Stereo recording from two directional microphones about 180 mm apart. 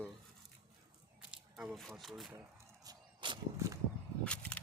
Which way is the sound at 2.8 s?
25° right (ahead or behind).